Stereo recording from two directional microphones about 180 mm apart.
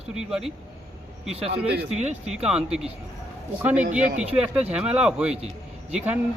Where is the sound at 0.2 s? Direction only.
5° right (ahead or behind).